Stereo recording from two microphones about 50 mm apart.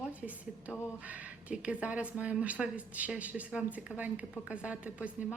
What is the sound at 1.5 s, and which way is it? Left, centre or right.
A woman's voice, right.